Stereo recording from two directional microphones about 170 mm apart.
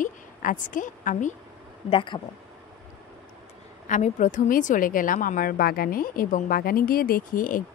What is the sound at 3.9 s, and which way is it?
A woman's voice, 45° left (ahead or behind).